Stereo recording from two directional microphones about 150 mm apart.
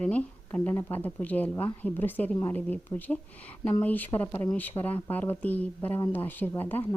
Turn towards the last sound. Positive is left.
turn(degrees=10)  # may be behind; listen again after turning